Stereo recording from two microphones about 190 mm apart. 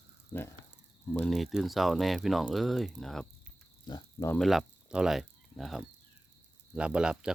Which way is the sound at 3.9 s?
20° left (ahead or behind).